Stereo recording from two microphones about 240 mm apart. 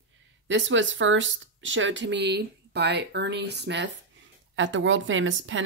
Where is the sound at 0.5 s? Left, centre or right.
Right.